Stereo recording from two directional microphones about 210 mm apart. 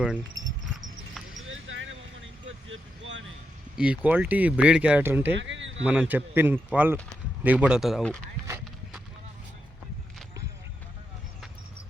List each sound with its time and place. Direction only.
0.7 s clip-clop: centre (ahead or behind)
1.5 s vehicle: 65° right (ahead or behind)
3.8 s speech: 5° right (ahead or behind)
5.3 s a sound: 60° right (ahead or behind)
5.8 s speech: 5° right (ahead or behind)